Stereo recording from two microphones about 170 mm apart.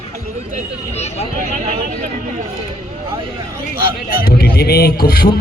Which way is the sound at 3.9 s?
65° left (ahead or behind).